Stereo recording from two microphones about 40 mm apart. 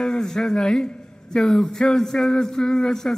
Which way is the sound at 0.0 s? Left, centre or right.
Centre.